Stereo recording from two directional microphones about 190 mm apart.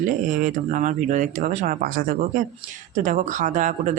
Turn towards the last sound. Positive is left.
turn(degrees=-40)  # may be behind; listen again after turning